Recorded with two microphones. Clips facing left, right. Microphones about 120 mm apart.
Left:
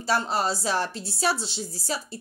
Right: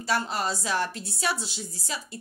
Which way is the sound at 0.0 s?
30° left (ahead or behind).